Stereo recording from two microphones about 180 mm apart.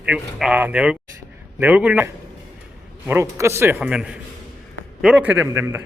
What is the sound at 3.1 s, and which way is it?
A man's voice, 15° right (ahead or behind).